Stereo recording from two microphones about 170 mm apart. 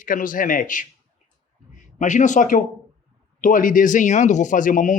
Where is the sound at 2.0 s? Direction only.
45° left (ahead or behind).